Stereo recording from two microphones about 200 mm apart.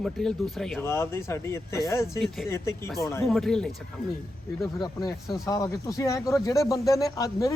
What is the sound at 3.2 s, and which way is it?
Speech, centre (ahead or behind).